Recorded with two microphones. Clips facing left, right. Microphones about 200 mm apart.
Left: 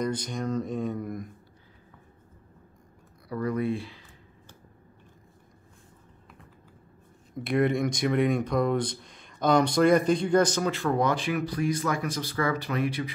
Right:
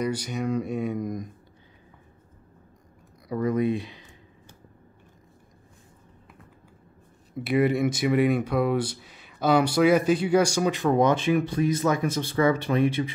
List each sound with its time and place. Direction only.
0.0 s speech: 10° right (ahead or behind)
3.3 s speech: 20° right (ahead or behind)
7.3 s speech: 5° right (ahead or behind); by 13.1 s 25° right (ahead or behind)